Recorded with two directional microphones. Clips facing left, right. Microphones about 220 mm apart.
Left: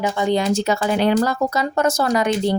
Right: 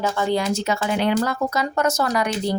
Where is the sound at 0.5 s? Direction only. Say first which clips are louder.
Left 3 dB; 35° left (ahead or behind).